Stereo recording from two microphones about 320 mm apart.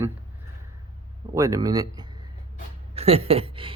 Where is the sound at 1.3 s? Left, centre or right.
Centre.